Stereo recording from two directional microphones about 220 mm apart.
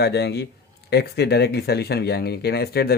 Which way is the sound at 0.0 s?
50° left (ahead or behind).